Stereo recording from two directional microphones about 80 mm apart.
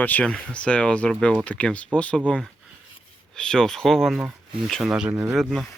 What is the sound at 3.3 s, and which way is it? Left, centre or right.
Speech, centre.